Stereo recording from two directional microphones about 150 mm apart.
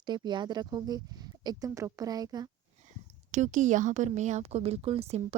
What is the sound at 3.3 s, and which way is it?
A woman's voice, 55° right (ahead or behind).